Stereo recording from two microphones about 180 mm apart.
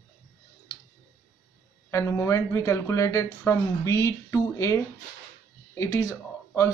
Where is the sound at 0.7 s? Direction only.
20° left (ahead or behind).